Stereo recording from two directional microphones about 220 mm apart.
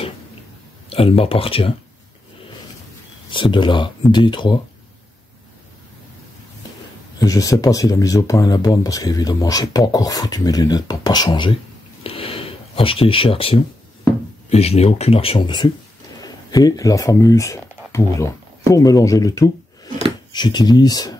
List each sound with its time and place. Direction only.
0.8 s speech: 25° left (ahead or behind)
3.3 s speech: 20° left (ahead or behind)
7.2 s speech: 15° left (ahead or behind)
12.0 s a sound: 25° left (ahead or behind)
14.5 s speech: 30° left (ahead or behind)